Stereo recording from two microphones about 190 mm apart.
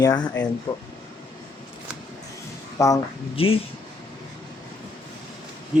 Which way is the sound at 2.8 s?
15° left (ahead or behind).